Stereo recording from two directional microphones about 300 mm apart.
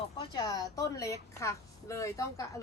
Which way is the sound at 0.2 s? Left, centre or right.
Centre.